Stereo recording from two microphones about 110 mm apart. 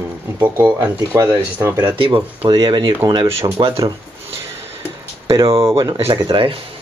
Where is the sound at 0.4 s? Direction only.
15° right (ahead or behind).